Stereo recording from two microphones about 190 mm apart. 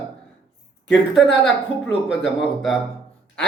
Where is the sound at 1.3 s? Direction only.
70° left (ahead or behind).